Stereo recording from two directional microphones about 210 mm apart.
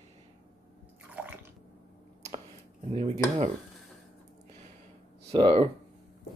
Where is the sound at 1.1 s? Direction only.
10° right (ahead or behind).